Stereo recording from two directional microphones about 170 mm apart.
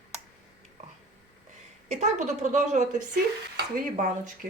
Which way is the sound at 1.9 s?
45° right (ahead or behind).